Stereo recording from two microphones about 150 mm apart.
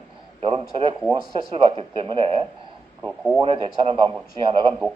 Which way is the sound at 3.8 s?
35° right (ahead or behind).